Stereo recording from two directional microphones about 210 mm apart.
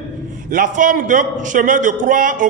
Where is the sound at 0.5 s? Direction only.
40° right (ahead or behind).